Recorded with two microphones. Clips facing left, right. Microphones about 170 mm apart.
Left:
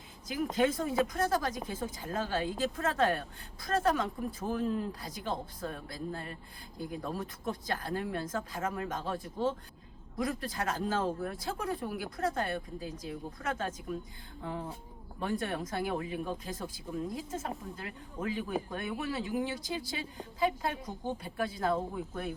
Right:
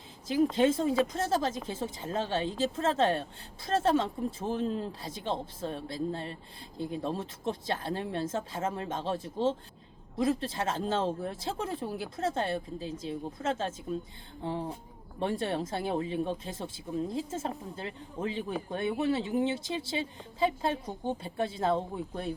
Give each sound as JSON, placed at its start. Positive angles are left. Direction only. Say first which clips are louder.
{"t": 0.5, "sound": "speech", "louder": "left 1 dB", "side_deg": -25}